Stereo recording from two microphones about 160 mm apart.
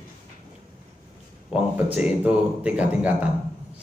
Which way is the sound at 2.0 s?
5° right (ahead or behind).